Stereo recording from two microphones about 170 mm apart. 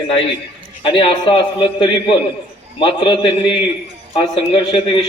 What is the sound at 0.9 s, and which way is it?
A man's voice, 30° left (ahead or behind).